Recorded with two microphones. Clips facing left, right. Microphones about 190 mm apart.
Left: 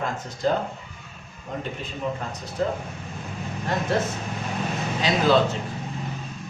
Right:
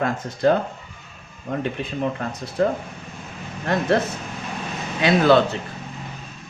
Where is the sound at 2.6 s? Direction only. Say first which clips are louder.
Right 5 dB; 65° right (ahead or behind).